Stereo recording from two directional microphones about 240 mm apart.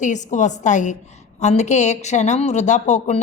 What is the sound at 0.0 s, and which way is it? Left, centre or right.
A woman's voice, left.